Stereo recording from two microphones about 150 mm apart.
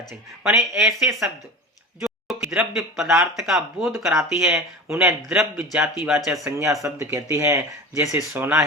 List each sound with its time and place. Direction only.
0.4 s speech: 20° right (ahead or behind)
0.9 s speech: 5° right (ahead or behind)
2.0 s a sound: centre (ahead or behind)
3.2 s speech: centre (ahead or behind)
4.5 s speech: 20° right (ahead or behind)
5.0 s speech: 5° right (ahead or behind)
6.4 s speech: 20° right (ahead or behind)